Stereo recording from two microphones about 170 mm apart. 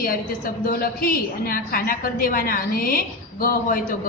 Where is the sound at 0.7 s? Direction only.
55° left (ahead or behind).